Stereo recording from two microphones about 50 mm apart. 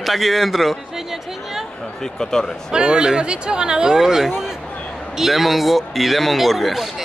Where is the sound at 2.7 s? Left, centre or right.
Centre.